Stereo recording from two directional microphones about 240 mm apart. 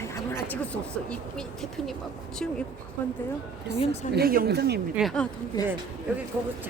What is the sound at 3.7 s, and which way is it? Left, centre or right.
Speech, left.